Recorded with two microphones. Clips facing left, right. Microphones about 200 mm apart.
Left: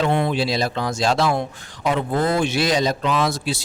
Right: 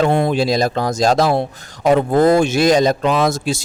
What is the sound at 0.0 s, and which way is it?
Speech, 40° right (ahead or behind).